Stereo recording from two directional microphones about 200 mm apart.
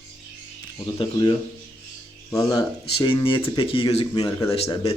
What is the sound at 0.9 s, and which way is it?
Speech, 25° left (ahead or behind).